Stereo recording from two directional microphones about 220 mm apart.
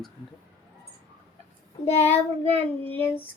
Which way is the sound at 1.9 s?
30° left (ahead or behind).